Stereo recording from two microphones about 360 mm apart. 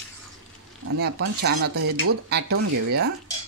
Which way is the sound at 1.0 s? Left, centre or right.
Right.